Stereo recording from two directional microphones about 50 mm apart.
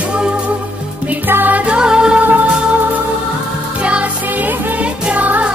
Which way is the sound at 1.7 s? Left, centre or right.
Centre.